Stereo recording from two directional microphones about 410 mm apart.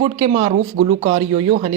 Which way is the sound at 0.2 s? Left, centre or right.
Centre.